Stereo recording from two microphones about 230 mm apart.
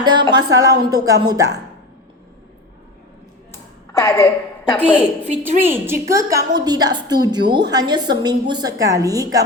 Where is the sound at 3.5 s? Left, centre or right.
Centre.